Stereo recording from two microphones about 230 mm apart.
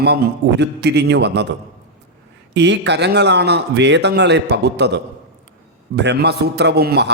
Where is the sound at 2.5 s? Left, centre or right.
Right.